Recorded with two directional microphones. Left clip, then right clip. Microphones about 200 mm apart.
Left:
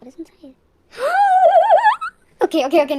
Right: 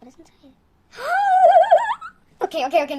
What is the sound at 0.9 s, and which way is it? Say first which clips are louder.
Gasp: left 4 dB; 35° left (ahead or behind).